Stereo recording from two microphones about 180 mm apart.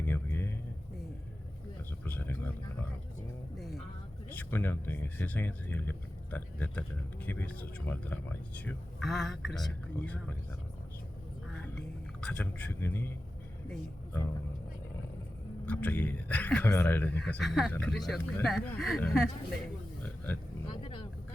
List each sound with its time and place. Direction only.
0.0 s a sound: 10° left (ahead or behind)
2.0 s a sound: 10° left (ahead or behind)
3.6 s music: centre (ahead or behind)
4.4 s speech: 10° left (ahead or behind)
11.5 s music: 5° left (ahead or behind)
12.2 s speech: 5° left (ahead or behind)
15.6 s speech: 10° left (ahead or behind)
20.7 s vehicle: 30° left (ahead or behind)